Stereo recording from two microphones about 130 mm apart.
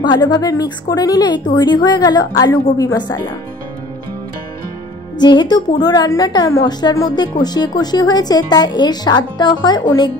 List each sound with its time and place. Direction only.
0.0 s a woman's voice: 35° left (ahead or behind)
5.2 s a woman's voice: 35° left (ahead or behind)